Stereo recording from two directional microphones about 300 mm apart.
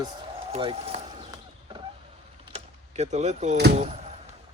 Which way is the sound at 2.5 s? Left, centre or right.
Right.